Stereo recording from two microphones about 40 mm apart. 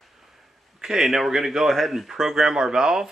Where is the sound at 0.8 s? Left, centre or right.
Centre.